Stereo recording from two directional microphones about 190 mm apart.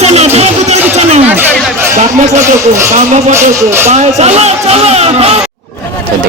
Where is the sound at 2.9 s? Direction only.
40° right (ahead or behind).